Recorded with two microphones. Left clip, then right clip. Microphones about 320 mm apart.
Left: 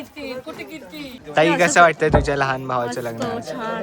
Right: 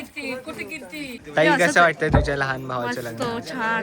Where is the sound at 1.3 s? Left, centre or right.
Centre.